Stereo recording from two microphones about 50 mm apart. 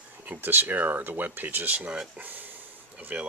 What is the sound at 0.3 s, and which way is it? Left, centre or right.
Speech, right.